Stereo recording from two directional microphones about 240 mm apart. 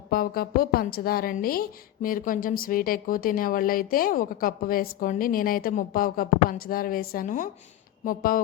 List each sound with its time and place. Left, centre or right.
0.1 s a woman's voice: left